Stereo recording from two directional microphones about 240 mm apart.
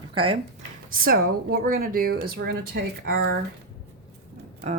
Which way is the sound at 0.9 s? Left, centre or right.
Right.